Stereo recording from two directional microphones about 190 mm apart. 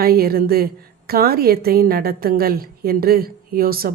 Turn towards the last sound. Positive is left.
turn(degrees=-50)  # may be behind; listen again after turning